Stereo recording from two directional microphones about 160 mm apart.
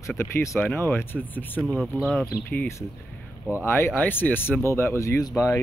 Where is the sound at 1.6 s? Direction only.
5° right (ahead or behind).